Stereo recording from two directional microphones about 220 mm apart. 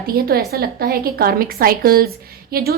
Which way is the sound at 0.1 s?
45° right (ahead or behind).